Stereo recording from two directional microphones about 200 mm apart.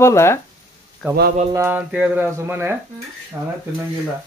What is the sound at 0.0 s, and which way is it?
Speech, 15° left (ahead or behind).